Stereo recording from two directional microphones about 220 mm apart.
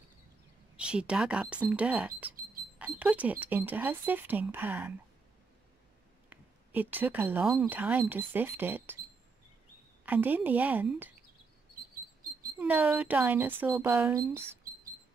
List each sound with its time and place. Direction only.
0.7 s speech: 5° right (ahead or behind)
6.3 s speech: 10° right (ahead or behind)
10.0 s speech: 10° right (ahead or behind)
12.5 s speech: 5° right (ahead or behind)